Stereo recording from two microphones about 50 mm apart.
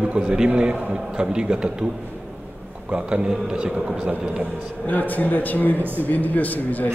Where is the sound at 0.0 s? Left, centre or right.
Right.